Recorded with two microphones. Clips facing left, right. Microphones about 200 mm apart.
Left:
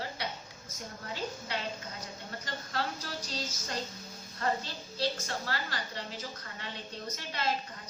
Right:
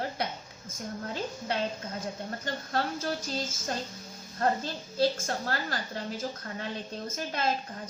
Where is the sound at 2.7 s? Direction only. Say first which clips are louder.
Right 6 dB; 50° right (ahead or behind).